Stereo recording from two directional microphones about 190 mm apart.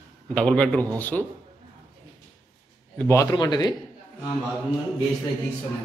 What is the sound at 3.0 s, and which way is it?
Speech, 15° left (ahead or behind).